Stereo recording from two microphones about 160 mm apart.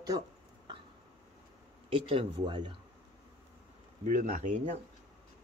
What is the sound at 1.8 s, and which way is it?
Speech, 35° right (ahead or behind).